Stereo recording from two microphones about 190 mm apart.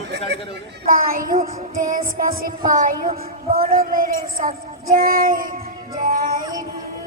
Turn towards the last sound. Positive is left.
turn(degrees=-45)  # may be behind; listen again after turning